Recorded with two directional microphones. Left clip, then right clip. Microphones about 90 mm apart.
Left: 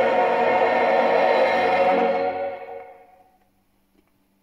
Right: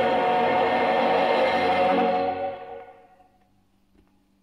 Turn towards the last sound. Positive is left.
turn(degrees=-15)  # may be behind; listen again after turning